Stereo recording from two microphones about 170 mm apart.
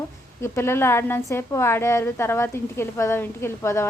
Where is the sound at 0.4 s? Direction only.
15° left (ahead or behind).